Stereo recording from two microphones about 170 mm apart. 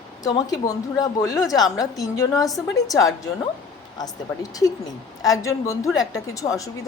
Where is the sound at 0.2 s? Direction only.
20° left (ahead or behind).